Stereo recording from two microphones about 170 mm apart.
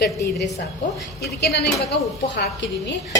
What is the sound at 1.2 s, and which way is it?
A woman's voice, 70° left (ahead or behind).